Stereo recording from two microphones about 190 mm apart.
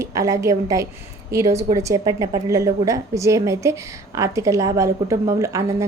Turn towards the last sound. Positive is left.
turn(degrees=-15)  # may be behind; listen again after turning